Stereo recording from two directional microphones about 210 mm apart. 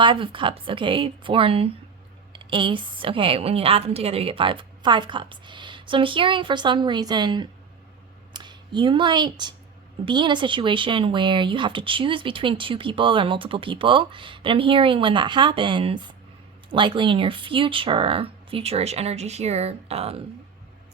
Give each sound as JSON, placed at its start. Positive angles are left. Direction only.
{"t": 0.0, "sound": "speech", "side_deg": -25}